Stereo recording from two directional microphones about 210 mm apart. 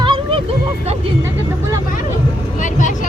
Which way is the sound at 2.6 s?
35° left (ahead or behind).